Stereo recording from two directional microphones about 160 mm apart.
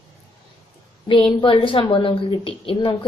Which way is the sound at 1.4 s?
30° left (ahead or behind).